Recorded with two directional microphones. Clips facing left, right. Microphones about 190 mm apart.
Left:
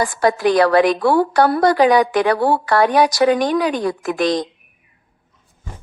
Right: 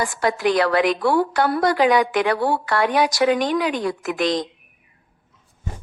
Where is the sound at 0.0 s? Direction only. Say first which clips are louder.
Left 4 dB; 35° left (ahead or behind).